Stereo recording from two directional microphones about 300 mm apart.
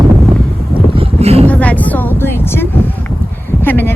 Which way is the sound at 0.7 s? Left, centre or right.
Centre.